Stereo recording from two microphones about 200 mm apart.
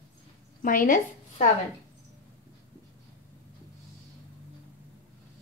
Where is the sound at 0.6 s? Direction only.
45° left (ahead or behind).